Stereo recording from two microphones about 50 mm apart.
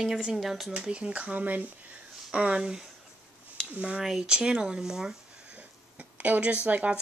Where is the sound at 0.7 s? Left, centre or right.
Right.